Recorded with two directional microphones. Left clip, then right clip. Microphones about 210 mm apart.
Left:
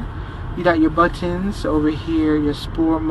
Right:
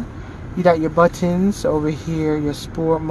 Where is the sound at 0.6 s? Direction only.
60° right (ahead or behind).